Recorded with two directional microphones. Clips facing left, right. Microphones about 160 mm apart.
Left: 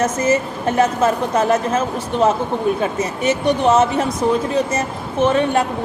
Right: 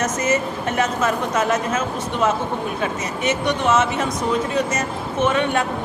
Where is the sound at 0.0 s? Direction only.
30° left (ahead or behind).